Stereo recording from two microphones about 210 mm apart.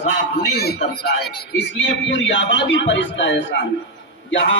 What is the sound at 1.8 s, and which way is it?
A man's voice, 65° left (ahead or behind).